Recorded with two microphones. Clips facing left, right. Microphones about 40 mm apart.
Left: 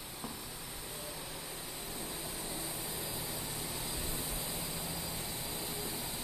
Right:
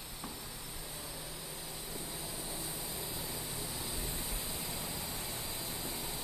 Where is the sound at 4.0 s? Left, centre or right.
Left.